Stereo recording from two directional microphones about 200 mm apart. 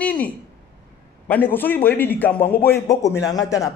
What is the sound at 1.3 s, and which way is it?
A woman's voice, 10° left (ahead or behind).